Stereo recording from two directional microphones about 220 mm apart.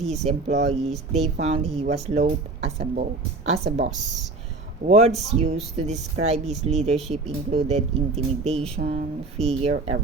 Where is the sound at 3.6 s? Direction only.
50° right (ahead or behind).